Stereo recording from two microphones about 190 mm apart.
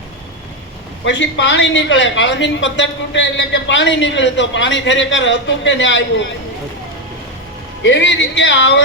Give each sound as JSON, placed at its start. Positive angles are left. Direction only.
{"t": 1.0, "sound": "a woman's voice", "side_deg": 70}
{"t": 7.8, "sound": "a woman's voice", "side_deg": 70}